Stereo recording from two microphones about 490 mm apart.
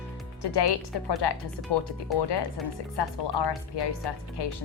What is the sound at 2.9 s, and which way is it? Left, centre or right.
Speech, left.